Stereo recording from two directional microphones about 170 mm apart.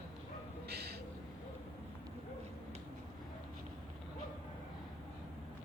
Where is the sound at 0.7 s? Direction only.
70° right (ahead or behind).